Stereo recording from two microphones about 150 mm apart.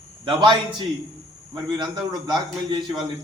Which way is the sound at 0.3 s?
30° right (ahead or behind).